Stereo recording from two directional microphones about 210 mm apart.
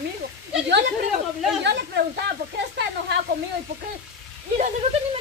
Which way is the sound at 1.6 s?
55° right (ahead or behind).